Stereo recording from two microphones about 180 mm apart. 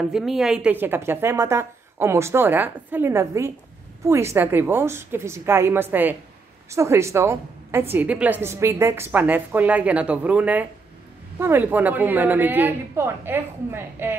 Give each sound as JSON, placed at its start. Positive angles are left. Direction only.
{"t": 0.1, "sound": "a woman's voice", "side_deg": 0}